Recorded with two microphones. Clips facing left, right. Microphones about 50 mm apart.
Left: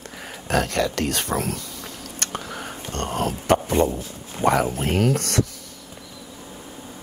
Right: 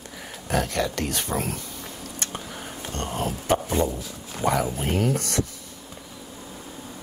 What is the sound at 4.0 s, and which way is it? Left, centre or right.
Speech, left.